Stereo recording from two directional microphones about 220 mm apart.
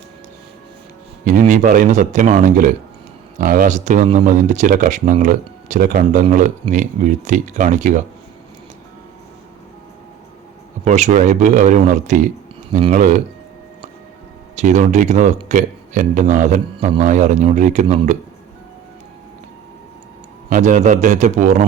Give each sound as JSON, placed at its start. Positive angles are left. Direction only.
{"t": 1.2, "sound": "speech", "side_deg": -35}
{"t": 10.8, "sound": "speech", "side_deg": -30}
{"t": 14.5, "sound": "speech", "side_deg": -30}
{"t": 20.5, "sound": "speech", "side_deg": -35}